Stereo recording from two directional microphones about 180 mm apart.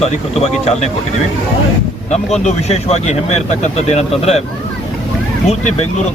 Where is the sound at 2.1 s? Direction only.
40° left (ahead or behind).